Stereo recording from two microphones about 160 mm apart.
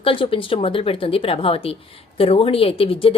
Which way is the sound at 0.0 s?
35° left (ahead or behind).